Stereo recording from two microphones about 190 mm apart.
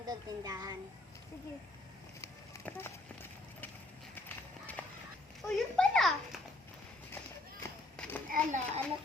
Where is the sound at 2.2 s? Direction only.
10° left (ahead or behind).